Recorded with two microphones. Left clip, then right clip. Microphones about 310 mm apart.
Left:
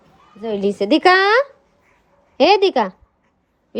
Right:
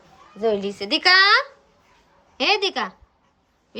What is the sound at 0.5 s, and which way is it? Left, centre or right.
A woman's voice, centre.